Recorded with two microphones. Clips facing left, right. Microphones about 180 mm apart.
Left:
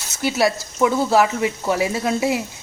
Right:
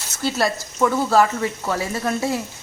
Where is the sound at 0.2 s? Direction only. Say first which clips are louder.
Left 3 dB; 10° left (ahead or behind).